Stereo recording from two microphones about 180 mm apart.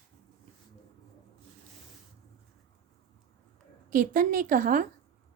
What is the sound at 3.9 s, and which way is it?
Speech, 50° right (ahead or behind).